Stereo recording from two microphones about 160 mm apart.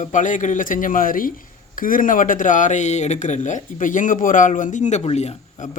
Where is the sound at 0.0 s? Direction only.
50° left (ahead or behind).